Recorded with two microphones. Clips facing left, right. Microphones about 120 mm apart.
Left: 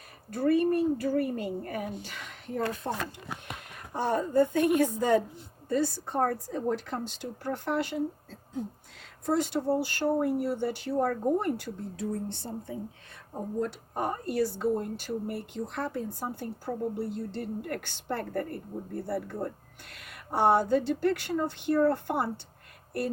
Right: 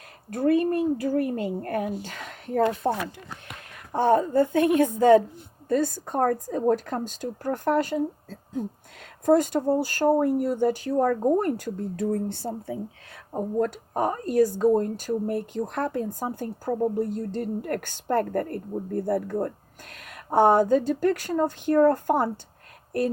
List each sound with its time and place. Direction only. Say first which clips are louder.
0.3 s a woman's voice: right 3 dB; 60° right (ahead or behind); by 22.3 s 45° right (ahead or behind)